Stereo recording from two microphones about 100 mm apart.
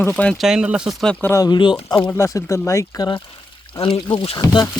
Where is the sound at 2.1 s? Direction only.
30° left (ahead or behind).